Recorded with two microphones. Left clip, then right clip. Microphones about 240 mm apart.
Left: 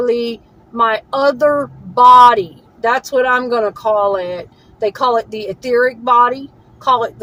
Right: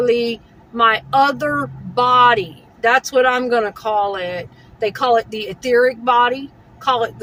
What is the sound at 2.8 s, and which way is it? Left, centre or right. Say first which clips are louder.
Speech: even; centre.